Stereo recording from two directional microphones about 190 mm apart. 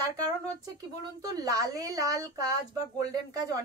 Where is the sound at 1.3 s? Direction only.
20° right (ahead or behind).